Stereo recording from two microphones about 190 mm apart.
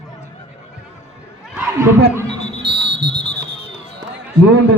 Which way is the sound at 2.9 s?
60° right (ahead or behind).